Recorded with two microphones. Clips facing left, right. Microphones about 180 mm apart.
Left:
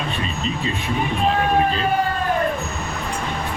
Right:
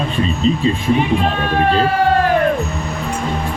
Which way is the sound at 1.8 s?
90° right.